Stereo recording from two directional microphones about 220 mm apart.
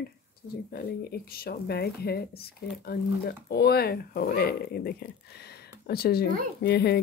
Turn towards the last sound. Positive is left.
turn(degrees=50)  # may be behind; listen again after turning